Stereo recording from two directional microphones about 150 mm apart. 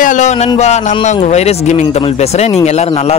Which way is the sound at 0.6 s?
50° left (ahead or behind).